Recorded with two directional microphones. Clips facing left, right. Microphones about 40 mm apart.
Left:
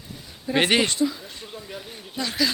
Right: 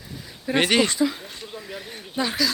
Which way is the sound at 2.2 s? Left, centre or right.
Right.